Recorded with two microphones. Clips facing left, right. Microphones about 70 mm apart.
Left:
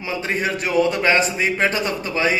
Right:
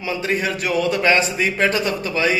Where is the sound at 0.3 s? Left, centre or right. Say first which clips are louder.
Right 1 dB; left.